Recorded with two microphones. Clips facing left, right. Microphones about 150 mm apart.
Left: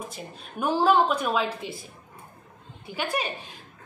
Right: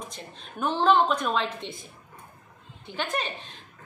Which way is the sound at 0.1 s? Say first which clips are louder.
Left 3 dB; 10° left (ahead or behind).